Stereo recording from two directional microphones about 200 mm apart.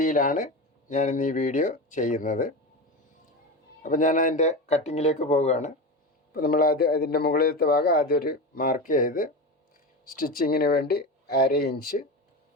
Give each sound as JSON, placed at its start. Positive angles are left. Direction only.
{"t": 0.0, "sound": "speech", "side_deg": 40}
{"t": 3.8, "sound": "speech", "side_deg": 40}
{"t": 6.3, "sound": "a man's voice", "side_deg": 50}